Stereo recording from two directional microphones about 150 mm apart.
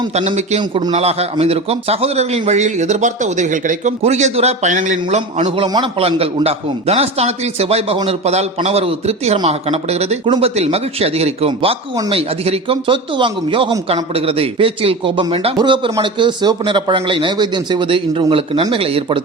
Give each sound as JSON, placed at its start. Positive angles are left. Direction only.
{"t": 0.1, "sound": "speech", "side_deg": -45}
{"t": 0.6, "sound": "speech", "side_deg": -30}
{"t": 0.9, "sound": "speech", "side_deg": -45}
{"t": 5.6, "sound": "a man's voice", "side_deg": -25}
{"t": 6.0, "sound": "speech", "side_deg": -40}
{"t": 10.2, "sound": "speech", "side_deg": -30}
{"t": 10.5, "sound": "speech", "side_deg": -45}